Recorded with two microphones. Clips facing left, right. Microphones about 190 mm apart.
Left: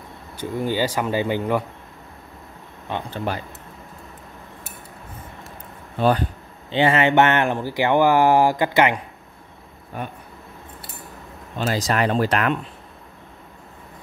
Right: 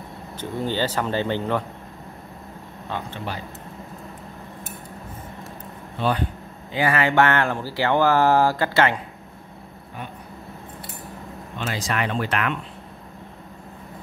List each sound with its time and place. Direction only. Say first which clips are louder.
0.4 s speech: left 2 dB; 10° left (ahead or behind)
2.9 s speech: left 2 dB; 15° left (ahead or behind)
5.9 s speech: left 4 dB; 45° left (ahead or behind)
6.7 s speech: left 4 dB; 25° left (ahead or behind)
11.5 s speech: left 5 dB; 40° left (ahead or behind)